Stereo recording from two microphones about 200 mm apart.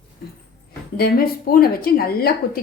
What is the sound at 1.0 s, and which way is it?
Speech, 50° left (ahead or behind).